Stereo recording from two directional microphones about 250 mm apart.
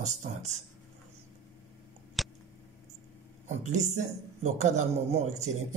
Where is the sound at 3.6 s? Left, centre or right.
Right.